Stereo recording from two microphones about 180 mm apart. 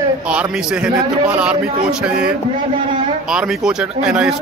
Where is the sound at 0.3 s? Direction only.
5° right (ahead or behind).